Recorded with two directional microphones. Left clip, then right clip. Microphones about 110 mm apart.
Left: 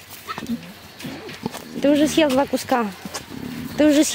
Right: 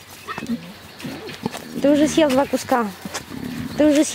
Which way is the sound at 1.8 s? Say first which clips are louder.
Right 1 dB; 10° left (ahead or behind).